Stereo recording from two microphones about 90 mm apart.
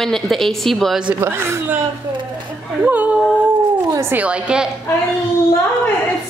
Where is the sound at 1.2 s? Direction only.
25° right (ahead or behind).